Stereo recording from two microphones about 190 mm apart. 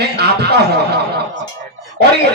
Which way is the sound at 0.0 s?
60° right (ahead or behind).